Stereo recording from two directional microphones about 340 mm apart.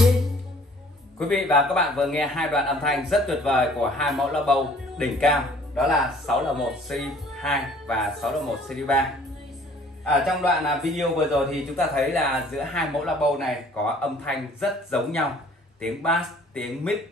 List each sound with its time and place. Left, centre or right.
1.3 s a man's voice: centre
10.2 s a man's voice: centre